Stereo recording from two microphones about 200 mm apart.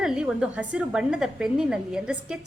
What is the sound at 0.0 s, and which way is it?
A woman's voice, 5° right (ahead or behind).